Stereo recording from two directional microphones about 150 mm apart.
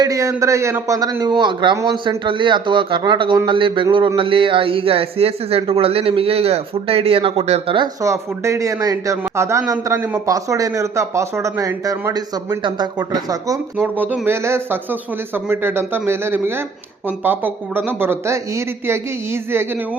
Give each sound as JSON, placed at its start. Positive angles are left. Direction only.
{"t": 0.0, "sound": "a man's voice", "side_deg": -20}
{"t": 8.0, "sound": "speech", "side_deg": -20}
{"t": 13.7, "sound": "speech", "side_deg": -10}